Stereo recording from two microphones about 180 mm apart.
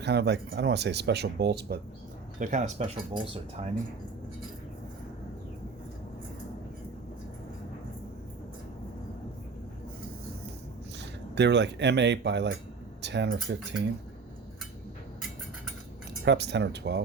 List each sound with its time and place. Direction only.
0.0 s speech: 70° right (ahead or behind)
2.4 s speech: 45° right (ahead or behind)
11.0 s speech: 75° right (ahead or behind)
16.2 s speech: 70° right (ahead or behind)